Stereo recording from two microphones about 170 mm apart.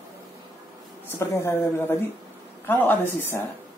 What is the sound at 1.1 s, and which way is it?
A woman's voice, 15° left (ahead or behind).